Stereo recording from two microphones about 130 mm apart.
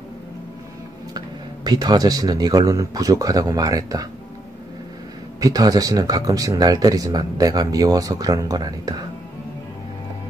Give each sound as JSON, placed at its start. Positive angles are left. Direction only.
{"t": 1.1, "sound": "speech", "side_deg": -30}
{"t": 5.4, "sound": "speech", "side_deg": -30}